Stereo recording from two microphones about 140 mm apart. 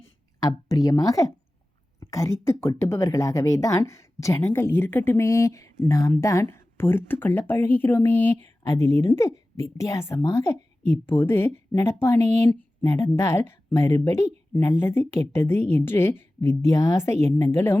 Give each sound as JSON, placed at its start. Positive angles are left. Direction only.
{"t": 0.3, "sound": "a woman's voice", "side_deg": 25}